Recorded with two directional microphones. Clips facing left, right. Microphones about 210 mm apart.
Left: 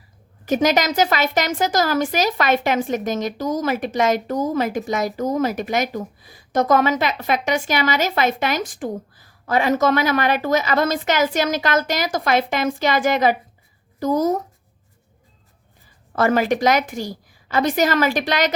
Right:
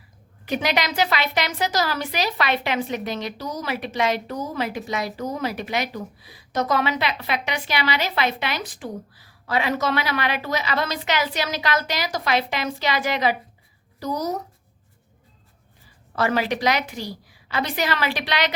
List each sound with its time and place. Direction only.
0.4 s a woman's voice: 45° left (ahead or behind)
16.1 s a woman's voice: 50° left (ahead or behind)